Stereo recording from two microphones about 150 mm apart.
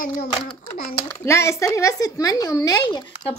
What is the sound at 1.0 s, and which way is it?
A woman's voice, 20° left (ahead or behind).